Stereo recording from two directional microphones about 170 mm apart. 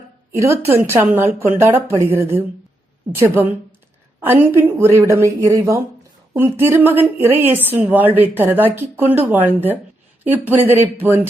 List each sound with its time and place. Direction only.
0.3 s a woman's voice: 15° right (ahead or behind)